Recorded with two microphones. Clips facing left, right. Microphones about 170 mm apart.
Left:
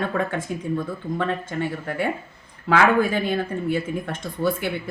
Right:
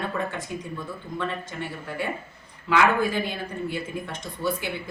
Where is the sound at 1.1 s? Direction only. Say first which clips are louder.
Left 5 dB; 60° left (ahead or behind).